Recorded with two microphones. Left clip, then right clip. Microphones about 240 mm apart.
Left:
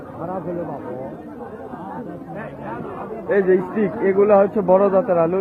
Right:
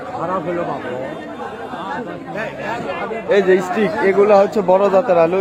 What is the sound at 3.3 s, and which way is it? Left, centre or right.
A man's voice, centre.